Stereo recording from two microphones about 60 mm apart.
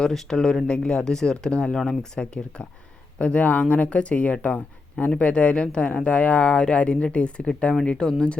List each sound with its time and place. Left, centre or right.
0.0 s speech: centre